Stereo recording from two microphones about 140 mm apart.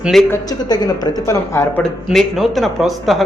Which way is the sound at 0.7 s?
25° left (ahead or behind).